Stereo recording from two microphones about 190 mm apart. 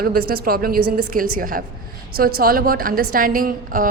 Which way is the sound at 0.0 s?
50° right (ahead or behind).